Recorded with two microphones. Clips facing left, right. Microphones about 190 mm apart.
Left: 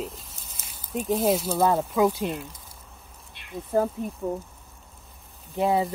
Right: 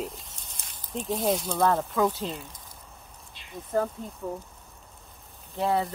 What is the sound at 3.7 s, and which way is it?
Speech, 10° left (ahead or behind).